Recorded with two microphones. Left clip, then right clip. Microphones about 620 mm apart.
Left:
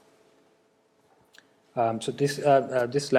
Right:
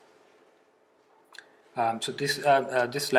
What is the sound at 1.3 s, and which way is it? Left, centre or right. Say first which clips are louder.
Speech: left 4 dB; left.